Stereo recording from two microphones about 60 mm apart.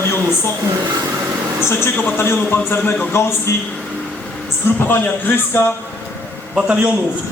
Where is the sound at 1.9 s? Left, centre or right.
Left.